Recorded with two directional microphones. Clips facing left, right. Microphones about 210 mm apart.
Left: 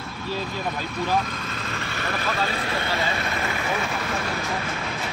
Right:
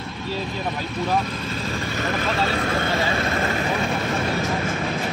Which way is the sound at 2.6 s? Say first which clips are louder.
Right 4 dB; 45° right (ahead or behind).